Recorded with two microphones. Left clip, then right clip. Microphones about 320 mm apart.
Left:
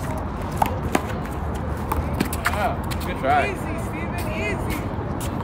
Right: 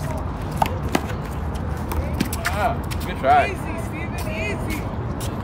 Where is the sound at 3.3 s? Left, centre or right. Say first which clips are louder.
Right 4 dB; right.